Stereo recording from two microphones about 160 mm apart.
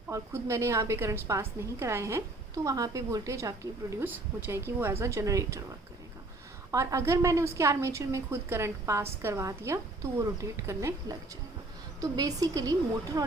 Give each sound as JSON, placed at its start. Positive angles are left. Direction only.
{"t": 0.1, "sound": "a woman's voice", "side_deg": -20}
{"t": 6.7, "sound": "a woman's voice", "side_deg": -20}
{"t": 11.9, "sound": "a woman's voice", "side_deg": -25}